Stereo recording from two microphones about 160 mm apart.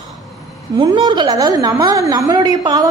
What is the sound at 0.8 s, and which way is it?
A woman's voice, 25° right (ahead or behind).